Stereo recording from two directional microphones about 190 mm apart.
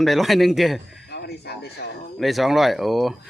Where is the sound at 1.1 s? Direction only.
60° left (ahead or behind).